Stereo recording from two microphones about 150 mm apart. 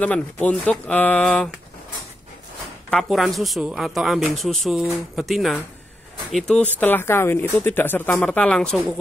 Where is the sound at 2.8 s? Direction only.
Centre (ahead or behind).